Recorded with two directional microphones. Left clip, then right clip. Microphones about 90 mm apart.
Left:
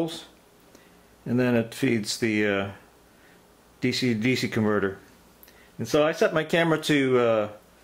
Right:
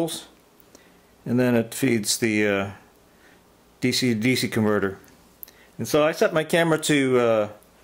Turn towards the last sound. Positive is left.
turn(degrees=-35)  # may be behind; listen again after turning